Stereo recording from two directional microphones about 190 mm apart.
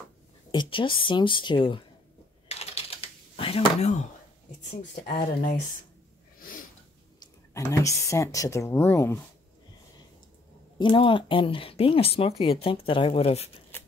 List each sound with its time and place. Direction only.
0.5 s speech: 25° left (ahead or behind)
2.4 s computer keyboard: 35° left (ahead or behind)
5.2 s speech: 45° left (ahead or behind)
7.2 s speech: 15° left (ahead or behind)
10.8 s speech: 25° left (ahead or behind)
13.7 s typewriter: 10° left (ahead or behind)